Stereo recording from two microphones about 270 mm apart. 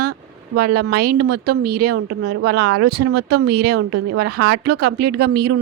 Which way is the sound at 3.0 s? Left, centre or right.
Right.